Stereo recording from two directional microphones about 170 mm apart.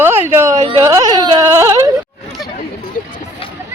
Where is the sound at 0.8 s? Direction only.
20° right (ahead or behind).